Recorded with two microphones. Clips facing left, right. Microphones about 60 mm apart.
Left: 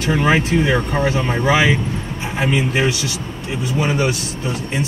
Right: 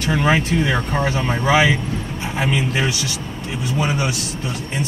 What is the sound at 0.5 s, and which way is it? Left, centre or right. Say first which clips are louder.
Speech: left 3 dB; centre.